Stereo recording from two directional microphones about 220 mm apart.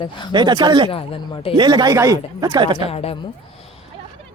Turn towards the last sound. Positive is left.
turn(degrees=25)  # may be behind; listen again after turning